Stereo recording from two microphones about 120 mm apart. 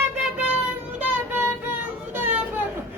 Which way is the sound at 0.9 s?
15° right (ahead or behind).